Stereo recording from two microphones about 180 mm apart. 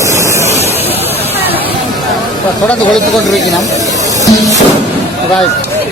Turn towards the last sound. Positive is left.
turn(degrees=20)  # may be behind; listen again after turning